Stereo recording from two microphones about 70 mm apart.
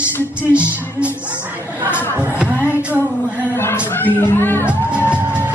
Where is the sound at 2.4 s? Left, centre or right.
Right.